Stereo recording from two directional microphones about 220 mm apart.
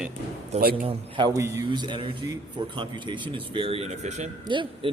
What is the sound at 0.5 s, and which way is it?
Speech, 30° right (ahead or behind).